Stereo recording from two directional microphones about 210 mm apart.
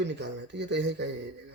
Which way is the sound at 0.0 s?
55° right (ahead or behind).